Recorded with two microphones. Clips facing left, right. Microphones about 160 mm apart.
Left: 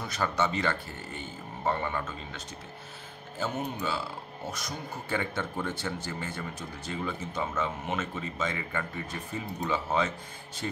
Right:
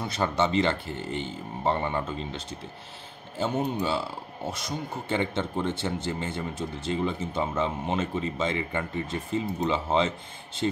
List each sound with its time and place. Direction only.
0.0 s speech: 25° right (ahead or behind)